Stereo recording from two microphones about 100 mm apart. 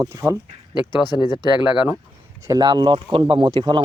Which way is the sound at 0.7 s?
45° left (ahead or behind).